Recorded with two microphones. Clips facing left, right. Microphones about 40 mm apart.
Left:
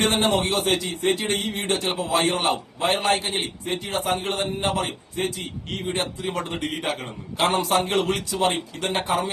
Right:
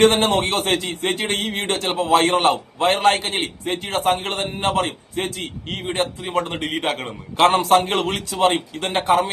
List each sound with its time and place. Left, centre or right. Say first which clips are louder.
0.0 s a man's voice: right 5 dB; right